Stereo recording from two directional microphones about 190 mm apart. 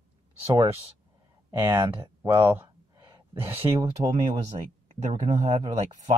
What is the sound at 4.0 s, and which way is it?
Speech, 20° right (ahead or behind).